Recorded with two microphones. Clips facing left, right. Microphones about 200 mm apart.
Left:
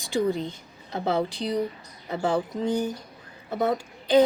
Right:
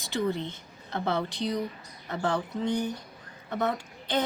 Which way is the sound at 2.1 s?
10° left (ahead or behind).